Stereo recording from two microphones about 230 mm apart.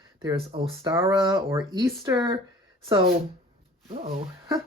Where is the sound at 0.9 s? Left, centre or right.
Centre.